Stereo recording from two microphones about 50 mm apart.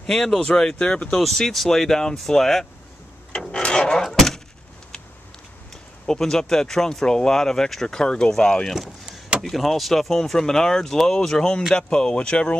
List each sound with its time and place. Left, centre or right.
0.0 s speech: centre
1.1 s speech: centre
3.3 s a sound: centre
6.0 s speech: centre
8.8 s vehicle: right
9.4 s speech: centre; by 12.5 s left